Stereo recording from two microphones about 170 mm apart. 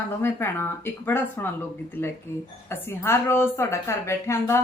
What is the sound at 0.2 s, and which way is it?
A woman's voice, 15° left (ahead or behind).